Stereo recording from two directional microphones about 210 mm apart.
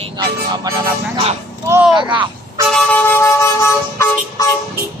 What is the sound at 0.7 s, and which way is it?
Speech, 15° right (ahead or behind).